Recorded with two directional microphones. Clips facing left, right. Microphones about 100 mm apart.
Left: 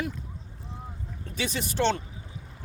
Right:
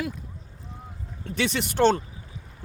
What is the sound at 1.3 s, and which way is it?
Speech, 70° right (ahead or behind).